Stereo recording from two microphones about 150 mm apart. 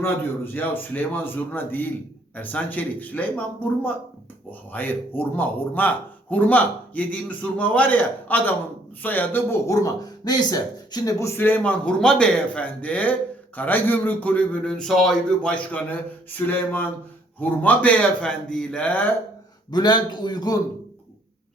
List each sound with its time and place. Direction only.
0.0 s speech: 15° left (ahead or behind)
19.7 s a man's voice: 30° left (ahead or behind)